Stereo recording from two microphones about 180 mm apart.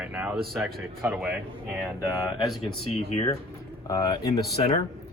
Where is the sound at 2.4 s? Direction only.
Centre (ahead or behind).